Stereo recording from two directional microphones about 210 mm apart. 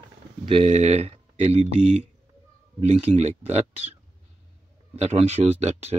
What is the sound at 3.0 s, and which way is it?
Speech, 30° right (ahead or behind).